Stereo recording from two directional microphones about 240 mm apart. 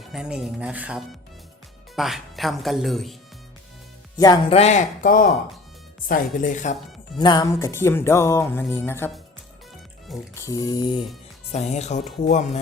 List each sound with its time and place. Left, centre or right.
0.1 s speech: centre
4.2 s speech: centre
7.2 s music: centre
10.3 s music: centre
11.5 s speech: left